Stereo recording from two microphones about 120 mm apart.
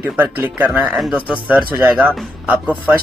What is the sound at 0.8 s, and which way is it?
Speech, 5° right (ahead or behind).